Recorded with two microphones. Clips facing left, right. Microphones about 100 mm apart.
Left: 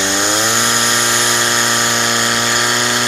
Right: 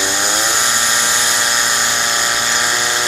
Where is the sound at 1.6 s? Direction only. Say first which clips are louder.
Left 3 dB; 20° left (ahead or behind).